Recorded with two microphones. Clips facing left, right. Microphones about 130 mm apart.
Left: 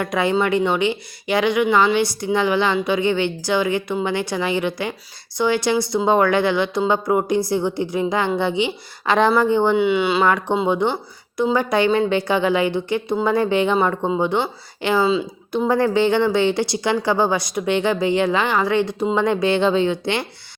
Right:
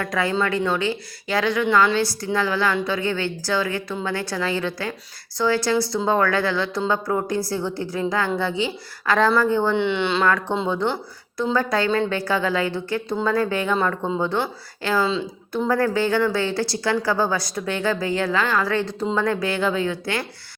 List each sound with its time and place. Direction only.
0.0 s a woman's voice: 20° left (ahead or behind)
9.7 s a woman's voice: 5° left (ahead or behind); by 20.2 s 20° left (ahead or behind)